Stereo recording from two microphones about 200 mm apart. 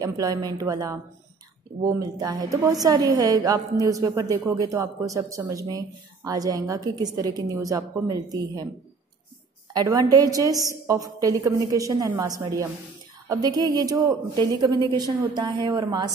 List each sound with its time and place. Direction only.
0.0 s a woman's voice: 15° right (ahead or behind)
9.7 s a woman's voice: 20° right (ahead or behind)